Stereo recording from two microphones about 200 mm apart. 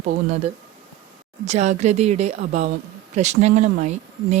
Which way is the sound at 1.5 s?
35° right (ahead or behind).